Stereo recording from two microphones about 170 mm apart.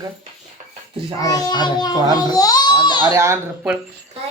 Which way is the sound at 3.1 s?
15° right (ahead or behind).